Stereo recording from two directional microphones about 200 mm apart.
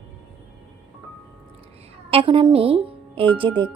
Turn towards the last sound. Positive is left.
turn(degrees=-25)  # may be behind; listen again after turning